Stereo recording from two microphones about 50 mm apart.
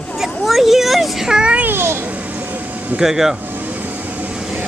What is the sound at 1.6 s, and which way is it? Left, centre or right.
Babbling, right.